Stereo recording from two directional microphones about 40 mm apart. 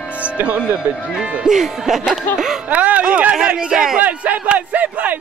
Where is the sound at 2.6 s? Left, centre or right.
Right; by 3.9 s centre.